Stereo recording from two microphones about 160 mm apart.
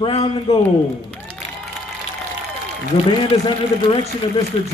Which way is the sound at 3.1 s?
30° left (ahead or behind).